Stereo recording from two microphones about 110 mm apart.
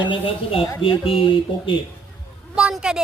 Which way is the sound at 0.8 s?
55° left (ahead or behind).